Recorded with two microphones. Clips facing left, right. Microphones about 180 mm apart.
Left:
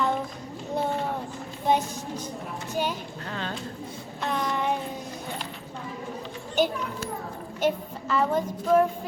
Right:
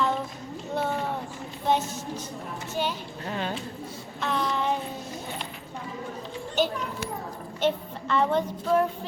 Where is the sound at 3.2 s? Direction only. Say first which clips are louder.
Right 3 dB; 15° right (ahead or behind).